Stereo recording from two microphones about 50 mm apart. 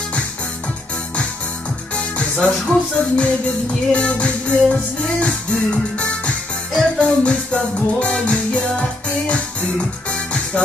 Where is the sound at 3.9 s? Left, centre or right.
Left.